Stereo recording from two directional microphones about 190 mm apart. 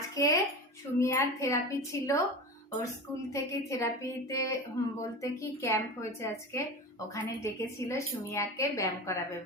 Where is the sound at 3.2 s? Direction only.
15° left (ahead or behind).